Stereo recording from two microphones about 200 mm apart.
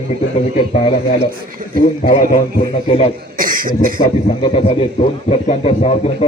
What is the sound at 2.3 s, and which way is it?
Speech, 25° left (ahead or behind).